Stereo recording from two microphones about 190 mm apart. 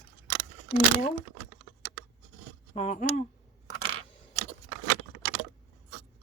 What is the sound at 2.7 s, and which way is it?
Speech, 35° left (ahead or behind).